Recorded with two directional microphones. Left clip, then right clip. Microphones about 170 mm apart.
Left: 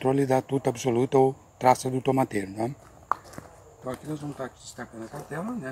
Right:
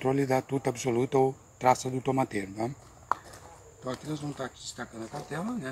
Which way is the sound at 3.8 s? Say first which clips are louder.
Left 1 dB; 5° left (ahead or behind).